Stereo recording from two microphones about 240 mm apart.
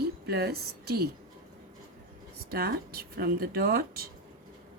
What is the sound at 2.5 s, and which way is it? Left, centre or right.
Speech, right.